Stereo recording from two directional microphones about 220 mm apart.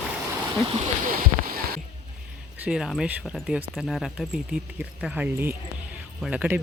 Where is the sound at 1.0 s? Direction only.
40° right (ahead or behind).